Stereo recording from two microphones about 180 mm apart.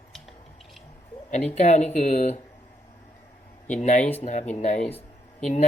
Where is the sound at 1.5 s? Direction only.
40° left (ahead or behind).